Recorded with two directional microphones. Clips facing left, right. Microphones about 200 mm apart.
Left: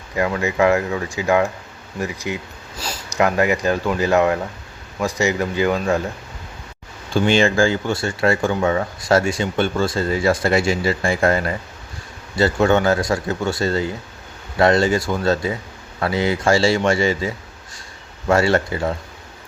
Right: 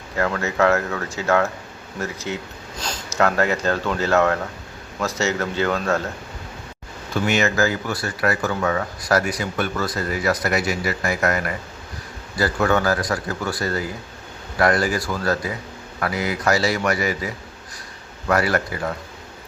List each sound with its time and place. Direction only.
0.2 s speech: 15° left (ahead or behind)
7.1 s speech: 30° left (ahead or behind)